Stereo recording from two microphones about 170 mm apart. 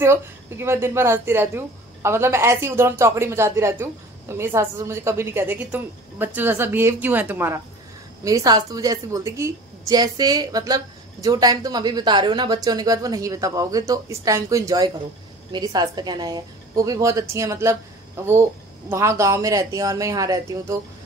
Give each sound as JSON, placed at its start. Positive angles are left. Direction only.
{"t": 0.0, "sound": "a woman's voice", "side_deg": -15}